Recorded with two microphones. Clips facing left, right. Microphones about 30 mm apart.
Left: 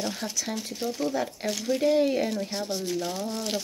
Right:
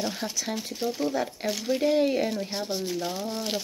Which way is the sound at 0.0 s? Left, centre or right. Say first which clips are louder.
Right 1 dB; centre.